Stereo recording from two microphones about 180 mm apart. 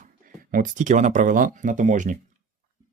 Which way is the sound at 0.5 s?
45° right (ahead or behind).